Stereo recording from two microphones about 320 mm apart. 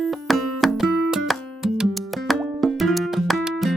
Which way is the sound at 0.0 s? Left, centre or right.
Centre.